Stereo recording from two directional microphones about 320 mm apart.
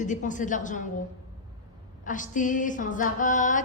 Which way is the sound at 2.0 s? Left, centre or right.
Left.